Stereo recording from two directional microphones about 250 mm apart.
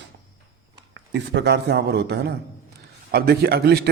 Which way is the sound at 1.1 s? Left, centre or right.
Right.